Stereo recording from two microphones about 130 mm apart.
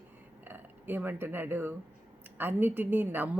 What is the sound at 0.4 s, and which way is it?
Speech, 15° right (ahead or behind).